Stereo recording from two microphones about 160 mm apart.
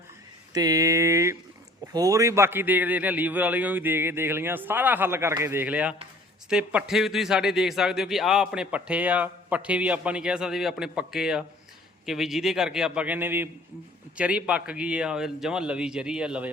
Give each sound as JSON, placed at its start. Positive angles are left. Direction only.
{"t": 0.5, "sound": "a man's voice", "side_deg": -20}